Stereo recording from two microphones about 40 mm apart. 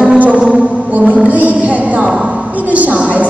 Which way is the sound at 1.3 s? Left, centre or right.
Right.